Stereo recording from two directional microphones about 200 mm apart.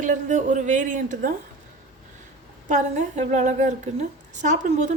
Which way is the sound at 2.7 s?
35° right (ahead or behind).